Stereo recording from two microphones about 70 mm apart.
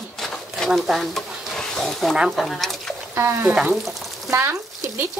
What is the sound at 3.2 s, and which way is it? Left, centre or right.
Speech, right.